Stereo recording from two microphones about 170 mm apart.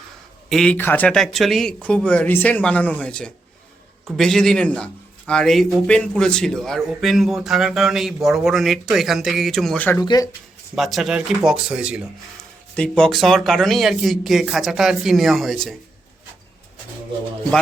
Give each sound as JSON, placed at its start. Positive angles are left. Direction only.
{"t": 0.5, "sound": "a man's voice", "side_deg": 5}
{"t": 10.0, "sound": "speech", "side_deg": 25}
{"t": 10.8, "sound": "a man's voice", "side_deg": 0}
{"t": 12.7, "sound": "a man's voice", "side_deg": 5}